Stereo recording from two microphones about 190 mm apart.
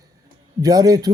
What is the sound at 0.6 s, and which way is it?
Speech, 20° right (ahead or behind).